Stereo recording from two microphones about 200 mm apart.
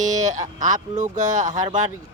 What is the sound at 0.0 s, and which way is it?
Speech, 35° right (ahead or behind).